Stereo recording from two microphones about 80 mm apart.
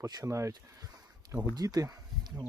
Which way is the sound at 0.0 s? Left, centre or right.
Right.